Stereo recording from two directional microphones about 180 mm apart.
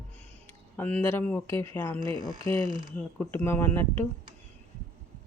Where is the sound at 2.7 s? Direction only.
25° right (ahead or behind).